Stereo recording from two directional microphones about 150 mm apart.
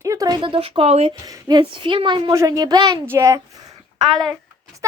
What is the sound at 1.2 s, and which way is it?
A woman's voice, 25° right (ahead or behind).